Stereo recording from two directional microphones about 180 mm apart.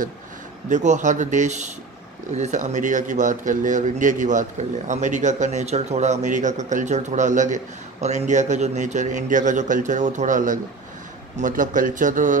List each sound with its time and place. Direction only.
0.7 s a man's voice: 40° right (ahead or behind)